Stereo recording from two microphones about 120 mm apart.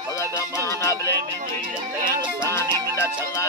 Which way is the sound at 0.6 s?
25° left (ahead or behind).